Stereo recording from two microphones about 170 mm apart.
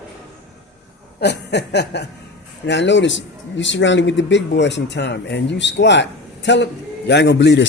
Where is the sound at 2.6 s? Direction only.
90° left.